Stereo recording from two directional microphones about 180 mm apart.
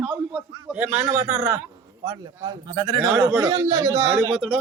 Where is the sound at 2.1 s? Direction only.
20° right (ahead or behind).